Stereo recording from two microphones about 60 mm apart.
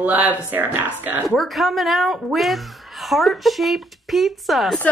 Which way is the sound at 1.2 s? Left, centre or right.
Centre.